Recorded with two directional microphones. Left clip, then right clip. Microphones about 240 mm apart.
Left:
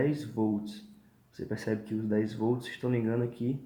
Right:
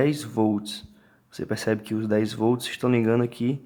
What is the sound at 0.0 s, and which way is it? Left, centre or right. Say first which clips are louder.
Speech: right 7 dB; right.